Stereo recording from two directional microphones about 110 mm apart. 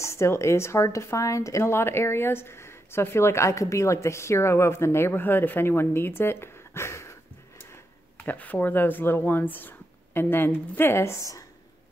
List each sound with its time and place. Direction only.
0.0 s speech: 25° left (ahead or behind)